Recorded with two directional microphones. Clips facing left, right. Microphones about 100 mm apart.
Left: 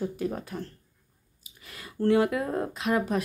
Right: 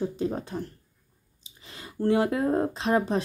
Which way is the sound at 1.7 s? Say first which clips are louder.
Left 1 dB; 25° right (ahead or behind).